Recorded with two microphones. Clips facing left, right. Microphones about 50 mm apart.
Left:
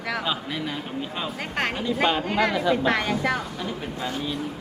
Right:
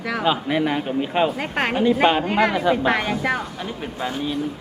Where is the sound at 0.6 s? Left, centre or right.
Right.